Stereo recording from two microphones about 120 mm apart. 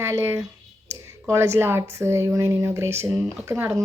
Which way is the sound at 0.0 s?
20° right (ahead or behind).